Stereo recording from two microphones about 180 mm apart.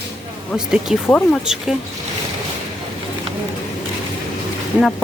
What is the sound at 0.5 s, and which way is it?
Speech, 5° right (ahead or behind).